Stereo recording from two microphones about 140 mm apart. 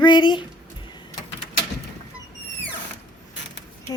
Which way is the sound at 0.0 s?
30° left (ahead or behind).